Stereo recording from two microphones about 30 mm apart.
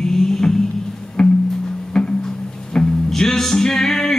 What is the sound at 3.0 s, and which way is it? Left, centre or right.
Music, centre.